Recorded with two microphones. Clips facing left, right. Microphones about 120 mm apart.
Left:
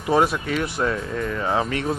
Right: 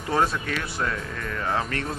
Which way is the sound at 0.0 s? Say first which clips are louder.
Left 4 dB; 15° left (ahead or behind).